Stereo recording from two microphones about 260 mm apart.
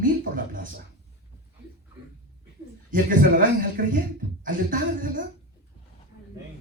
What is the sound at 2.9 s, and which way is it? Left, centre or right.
A man's voice, right.